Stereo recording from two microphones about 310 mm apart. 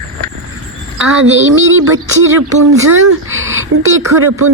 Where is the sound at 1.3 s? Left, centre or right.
Right.